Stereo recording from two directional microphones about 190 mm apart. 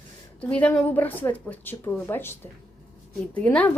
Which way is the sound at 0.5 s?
10° left (ahead or behind).